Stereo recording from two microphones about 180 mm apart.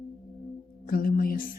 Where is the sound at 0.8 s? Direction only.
50° left (ahead or behind).